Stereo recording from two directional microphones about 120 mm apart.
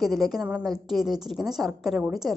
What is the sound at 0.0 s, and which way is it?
A woman's voice, centre (ahead or behind).